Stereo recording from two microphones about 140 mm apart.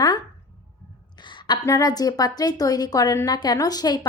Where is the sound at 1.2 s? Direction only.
30° left (ahead or behind).